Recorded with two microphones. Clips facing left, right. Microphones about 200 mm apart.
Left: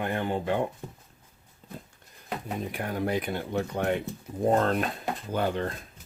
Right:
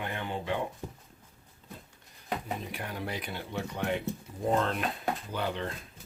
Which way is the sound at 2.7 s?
50° left (ahead or behind).